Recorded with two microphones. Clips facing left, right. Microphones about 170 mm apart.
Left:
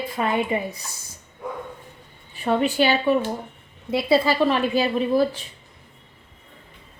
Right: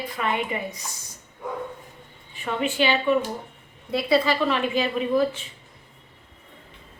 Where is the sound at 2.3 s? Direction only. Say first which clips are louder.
Left 6 dB; 40° left (ahead or behind).